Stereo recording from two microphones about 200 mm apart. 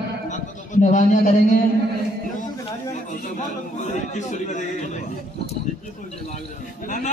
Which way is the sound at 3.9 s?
35° left (ahead or behind).